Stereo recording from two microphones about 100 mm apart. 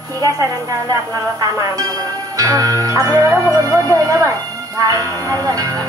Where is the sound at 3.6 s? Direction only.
35° right (ahead or behind).